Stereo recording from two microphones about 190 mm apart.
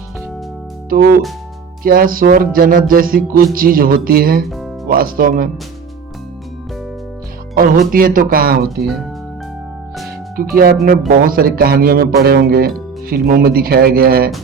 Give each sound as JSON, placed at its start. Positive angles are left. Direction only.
{"t": 0.9, "sound": "speech", "side_deg": -50}
{"t": 4.4, "sound": "speech", "side_deg": 0}
{"t": 4.9, "sound": "speech", "side_deg": -50}
{"t": 7.5, "sound": "speech", "side_deg": -45}
{"t": 10.3, "sound": "speech", "side_deg": -50}